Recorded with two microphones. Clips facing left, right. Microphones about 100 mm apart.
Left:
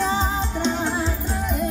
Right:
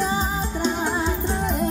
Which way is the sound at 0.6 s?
10° right (ahead or behind).